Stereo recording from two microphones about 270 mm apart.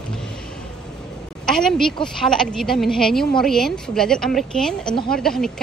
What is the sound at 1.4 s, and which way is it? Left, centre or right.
A woman's voice, centre.